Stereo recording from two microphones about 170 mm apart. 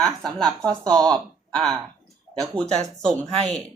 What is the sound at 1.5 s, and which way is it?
Speech, centre (ahead or behind).